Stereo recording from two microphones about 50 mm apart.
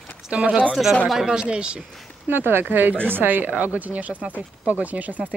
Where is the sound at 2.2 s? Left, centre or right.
Right.